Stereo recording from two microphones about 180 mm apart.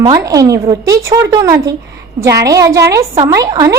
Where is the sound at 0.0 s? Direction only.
20° right (ahead or behind).